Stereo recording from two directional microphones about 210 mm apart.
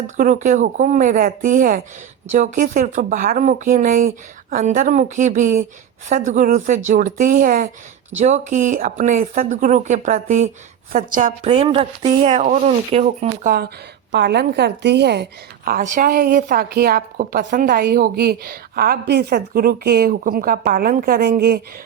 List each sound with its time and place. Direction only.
0.2 s speech: 35° right (ahead or behind)
11.4 s speech: 30° right (ahead or behind)
14.1 s a woman's voice: 55° right (ahead or behind)